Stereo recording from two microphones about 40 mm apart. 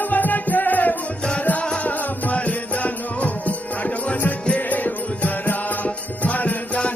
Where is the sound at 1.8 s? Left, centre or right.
Left.